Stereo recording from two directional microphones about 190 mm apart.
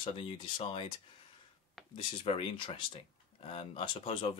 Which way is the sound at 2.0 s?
25° left (ahead or behind).